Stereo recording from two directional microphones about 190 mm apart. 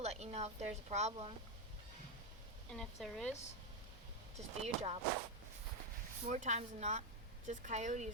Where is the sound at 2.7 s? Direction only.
Centre (ahead or behind).